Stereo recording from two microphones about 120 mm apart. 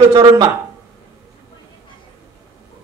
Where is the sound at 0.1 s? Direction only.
30° right (ahead or behind).